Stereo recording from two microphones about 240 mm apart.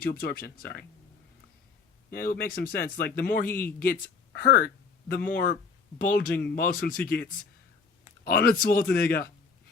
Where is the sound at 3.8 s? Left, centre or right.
Left.